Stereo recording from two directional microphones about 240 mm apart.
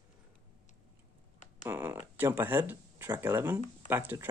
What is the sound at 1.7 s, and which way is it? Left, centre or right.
Speech, centre.